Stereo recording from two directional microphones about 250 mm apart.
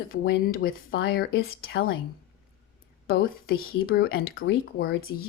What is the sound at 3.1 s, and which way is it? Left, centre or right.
Speech, left.